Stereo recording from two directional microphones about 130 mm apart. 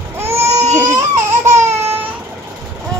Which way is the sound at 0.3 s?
55° right (ahead or behind).